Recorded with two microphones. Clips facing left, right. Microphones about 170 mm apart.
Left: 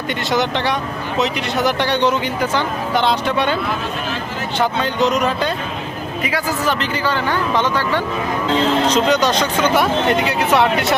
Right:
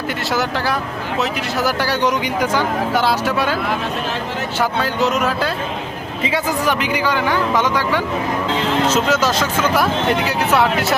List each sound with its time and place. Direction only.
0.3 s speech: centre (ahead or behind)
4.6 s speech: 5° right (ahead or behind)
6.7 s speech: 10° right (ahead or behind)